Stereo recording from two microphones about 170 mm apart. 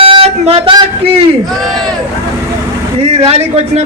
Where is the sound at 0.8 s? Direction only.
35° right (ahead or behind).